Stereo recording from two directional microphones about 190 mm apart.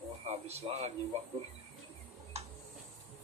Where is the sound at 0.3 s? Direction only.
35° right (ahead or behind).